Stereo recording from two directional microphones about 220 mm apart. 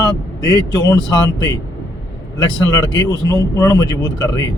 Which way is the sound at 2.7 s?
15° left (ahead or behind).